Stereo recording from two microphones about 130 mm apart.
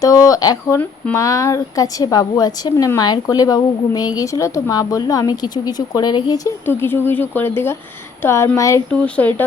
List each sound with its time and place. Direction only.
0.0 s a woman's voice: 25° left (ahead or behind)
6.7 s a woman's voice: 15° left (ahead or behind)
8.9 s speech: 10° left (ahead or behind)